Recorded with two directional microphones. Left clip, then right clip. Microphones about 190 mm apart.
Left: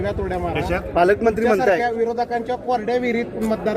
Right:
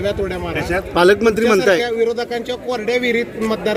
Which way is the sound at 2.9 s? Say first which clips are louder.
Right 8 dB; 55° right (ahead or behind).